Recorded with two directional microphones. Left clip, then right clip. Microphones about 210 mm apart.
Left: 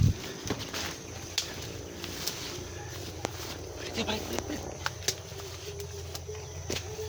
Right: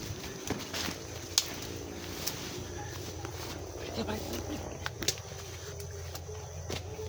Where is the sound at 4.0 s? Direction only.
30° left (ahead or behind).